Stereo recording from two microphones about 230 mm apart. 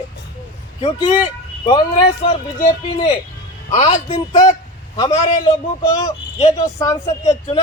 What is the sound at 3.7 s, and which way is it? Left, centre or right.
Speech, left.